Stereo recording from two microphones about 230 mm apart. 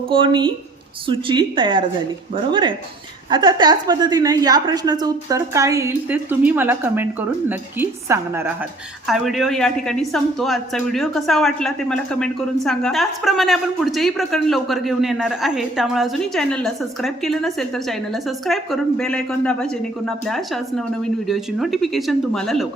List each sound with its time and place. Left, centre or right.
0.1 s a woman's voice: right
9.0 s a woman's voice: centre